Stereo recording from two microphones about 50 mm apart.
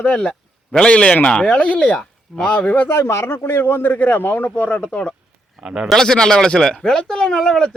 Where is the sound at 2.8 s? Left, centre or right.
Left.